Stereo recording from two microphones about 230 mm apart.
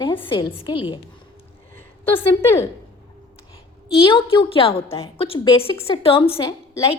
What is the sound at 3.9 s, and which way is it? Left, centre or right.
Speech, left.